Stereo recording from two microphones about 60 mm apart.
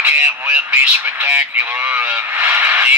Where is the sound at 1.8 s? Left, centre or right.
Right.